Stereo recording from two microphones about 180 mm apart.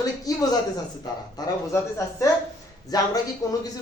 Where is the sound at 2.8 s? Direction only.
20° left (ahead or behind).